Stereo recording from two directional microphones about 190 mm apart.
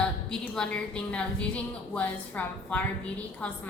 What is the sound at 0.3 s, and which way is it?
A woman's voice, 5° left (ahead or behind).